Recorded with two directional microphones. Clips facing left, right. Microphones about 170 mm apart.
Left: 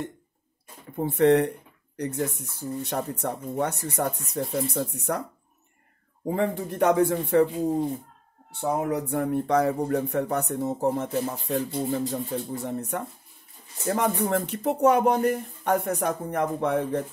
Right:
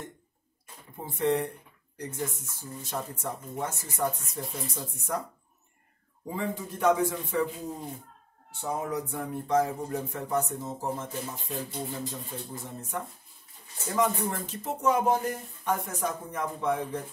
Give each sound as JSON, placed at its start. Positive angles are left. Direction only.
{"t": 0.9, "sound": "speech", "side_deg": 65}
{"t": 6.2, "sound": "speech", "side_deg": 60}
{"t": 8.5, "sound": "speech", "side_deg": 70}